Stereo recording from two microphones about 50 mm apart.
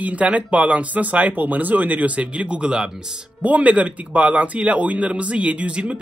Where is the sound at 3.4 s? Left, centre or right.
Right.